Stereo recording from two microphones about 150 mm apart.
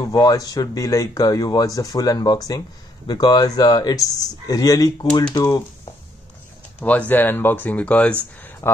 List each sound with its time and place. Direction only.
0.0 s speech: 25° left (ahead or behind)
6.8 s speech: 10° left (ahead or behind)
8.4 s a sound: 10° left (ahead or behind)